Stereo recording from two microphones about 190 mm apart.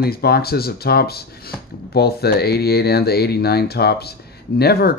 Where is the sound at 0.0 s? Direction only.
55° left (ahead or behind).